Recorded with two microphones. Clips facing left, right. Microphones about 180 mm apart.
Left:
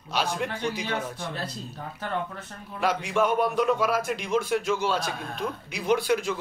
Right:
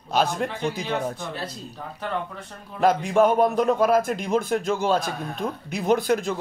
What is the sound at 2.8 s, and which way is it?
A man's voice, 40° right (ahead or behind).